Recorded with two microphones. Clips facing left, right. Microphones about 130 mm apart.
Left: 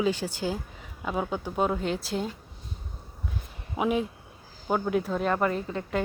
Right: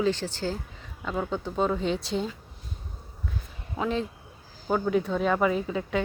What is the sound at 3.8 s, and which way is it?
Speech, 15° left (ahead or behind).